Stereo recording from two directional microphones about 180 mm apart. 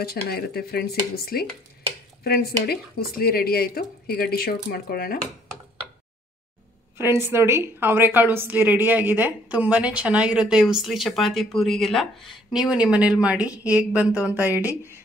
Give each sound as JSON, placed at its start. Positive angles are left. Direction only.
{"t": 0.0, "sound": "speech", "side_deg": 60}
{"t": 7.0, "sound": "a woman's voice", "side_deg": -15}